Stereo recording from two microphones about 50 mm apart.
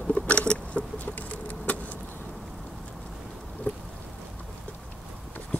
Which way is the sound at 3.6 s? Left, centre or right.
Left.